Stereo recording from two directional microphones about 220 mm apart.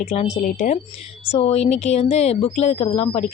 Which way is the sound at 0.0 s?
30° left (ahead or behind).